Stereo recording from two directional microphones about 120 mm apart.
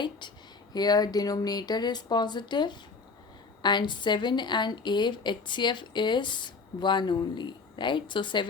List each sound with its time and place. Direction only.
0.7 s a woman's voice: 35° left (ahead or behind)